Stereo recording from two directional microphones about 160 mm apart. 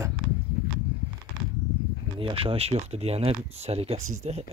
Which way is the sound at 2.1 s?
35° right (ahead or behind).